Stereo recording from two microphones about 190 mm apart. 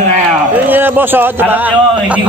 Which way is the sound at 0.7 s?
10° right (ahead or behind).